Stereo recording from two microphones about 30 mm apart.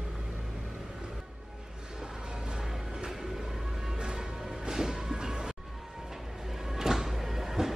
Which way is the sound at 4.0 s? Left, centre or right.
Right.